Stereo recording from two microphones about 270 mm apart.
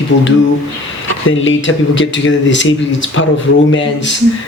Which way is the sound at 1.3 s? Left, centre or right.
Left.